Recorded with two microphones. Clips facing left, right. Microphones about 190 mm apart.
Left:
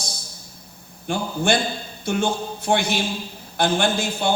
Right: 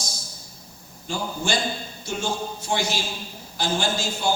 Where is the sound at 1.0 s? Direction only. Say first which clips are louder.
Left 6 dB; 60° left (ahead or behind).